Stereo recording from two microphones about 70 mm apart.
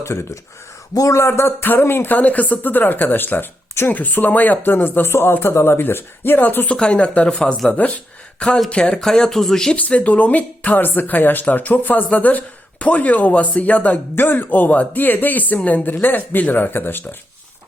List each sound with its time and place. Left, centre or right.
0.0 s speech: left
6.7 s speech: centre
9.7 s speech: left